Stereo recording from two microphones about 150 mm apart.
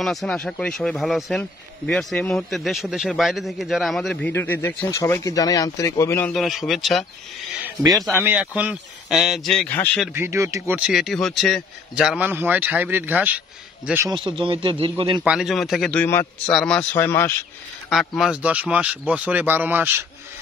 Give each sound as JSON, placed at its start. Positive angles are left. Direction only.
{"t": 0.0, "sound": "speech", "side_deg": 0}
{"t": 4.3, "sound": "speech", "side_deg": 15}
{"t": 6.3, "sound": "speech", "side_deg": 0}
{"t": 8.1, "sound": "speech", "side_deg": -15}
{"t": 10.1, "sound": "speech", "side_deg": -15}
{"t": 10.8, "sound": "speech", "side_deg": -5}
{"t": 14.2, "sound": "a man's voice", "side_deg": -35}
{"t": 15.2, "sound": "speech", "side_deg": 0}
{"t": 16.9, "sound": "speech", "side_deg": 15}
{"t": 17.8, "sound": "speech", "side_deg": 0}